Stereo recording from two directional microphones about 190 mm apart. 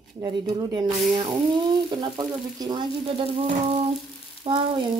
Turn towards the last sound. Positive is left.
turn(degrees=-25)  # may be behind; listen again after turning